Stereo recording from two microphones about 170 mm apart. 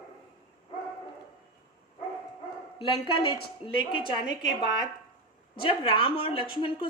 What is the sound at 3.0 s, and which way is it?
A woman's voice, 30° left (ahead or behind).